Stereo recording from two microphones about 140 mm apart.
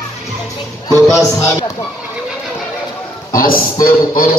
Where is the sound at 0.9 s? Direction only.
20° left (ahead or behind).